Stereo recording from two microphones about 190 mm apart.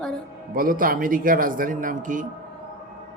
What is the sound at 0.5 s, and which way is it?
Speech, 45° right (ahead or behind).